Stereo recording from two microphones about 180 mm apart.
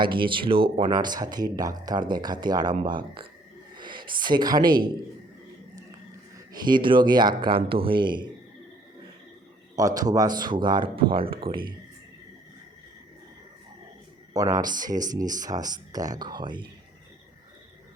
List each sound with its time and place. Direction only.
0.0 s speech: 25° right (ahead or behind)
6.3 s speech: 25° right (ahead or behind)
9.7 s speech: 20° right (ahead or behind)
14.3 s speech: 20° right (ahead or behind)